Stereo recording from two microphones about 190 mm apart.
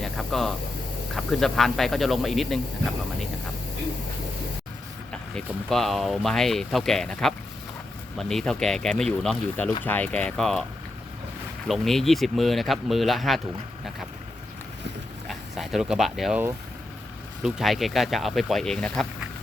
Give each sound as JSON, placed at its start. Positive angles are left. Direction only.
{"t": 0.0, "sound": "speech", "side_deg": 0}
{"t": 5.1, "sound": "speech", "side_deg": 5}
{"t": 11.7, "sound": "speech", "side_deg": 0}
{"t": 15.3, "sound": "speech", "side_deg": 0}
{"t": 17.4, "sound": "speech", "side_deg": 0}